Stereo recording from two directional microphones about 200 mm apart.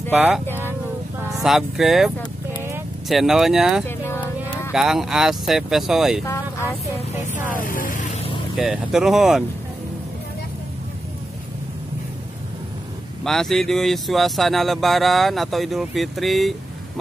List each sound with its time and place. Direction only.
0.1 s speech: 5° right (ahead or behind)
3.8 s a sound: 10° left (ahead or behind)
4.7 s speech: centre (ahead or behind)
7.3 s vehicle: 40° left (ahead or behind)
8.5 s speech: centre (ahead or behind)
13.2 s speech: centre (ahead or behind)